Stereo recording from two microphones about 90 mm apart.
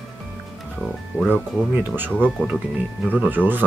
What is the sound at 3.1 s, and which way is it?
Speech, 20° right (ahead or behind).